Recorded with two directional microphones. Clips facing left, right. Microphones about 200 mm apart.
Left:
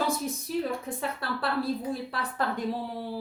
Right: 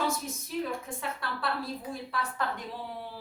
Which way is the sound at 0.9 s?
35° left (ahead or behind).